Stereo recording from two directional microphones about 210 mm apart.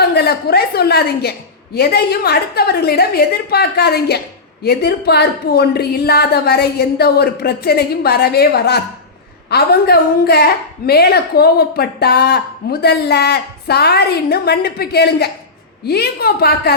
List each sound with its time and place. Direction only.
0.1 s a woman's voice: 50° left (ahead or behind)